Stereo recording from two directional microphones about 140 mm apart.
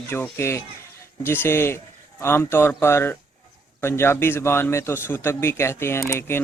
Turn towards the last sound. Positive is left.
turn(degrees=20)  # may be behind; listen again after turning